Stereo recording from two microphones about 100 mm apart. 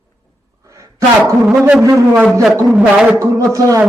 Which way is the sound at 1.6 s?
10° right (ahead or behind).